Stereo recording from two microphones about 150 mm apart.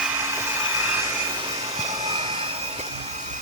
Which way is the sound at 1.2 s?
30° right (ahead or behind).